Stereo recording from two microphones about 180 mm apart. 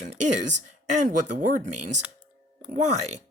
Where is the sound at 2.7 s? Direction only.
40° right (ahead or behind).